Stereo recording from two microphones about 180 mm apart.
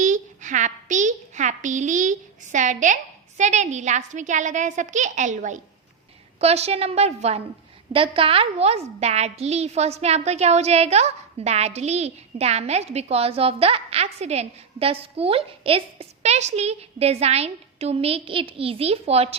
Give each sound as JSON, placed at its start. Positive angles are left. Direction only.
{"t": 0.0, "sound": "a child's voice", "side_deg": -45}